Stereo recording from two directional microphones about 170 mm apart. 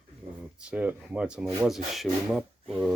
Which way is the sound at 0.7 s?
10° right (ahead or behind).